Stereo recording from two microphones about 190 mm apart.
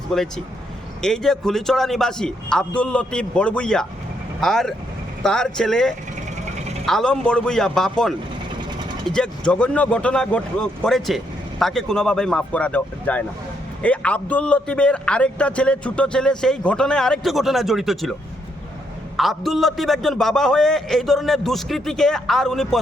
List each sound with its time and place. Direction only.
0.1 s a man's voice: centre (ahead or behind)
19.1 s a man's voice: centre (ahead or behind)